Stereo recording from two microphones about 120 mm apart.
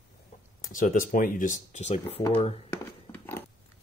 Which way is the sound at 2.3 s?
50° left (ahead or behind).